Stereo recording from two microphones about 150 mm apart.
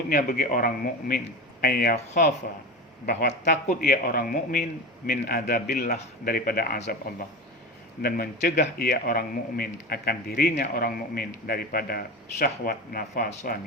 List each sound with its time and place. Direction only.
0.1 s a man's voice: 85° left; by 1.2 s 70° left (ahead or behind)
1.6 s a man's voice: 90° left
3.4 s a man's voice: 85° left
8.0 s a man's voice: 85° left
10.6 s a man's voice: 75° left (ahead or behind)